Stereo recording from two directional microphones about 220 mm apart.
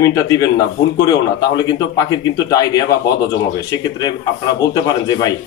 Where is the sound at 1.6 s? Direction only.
15° left (ahead or behind).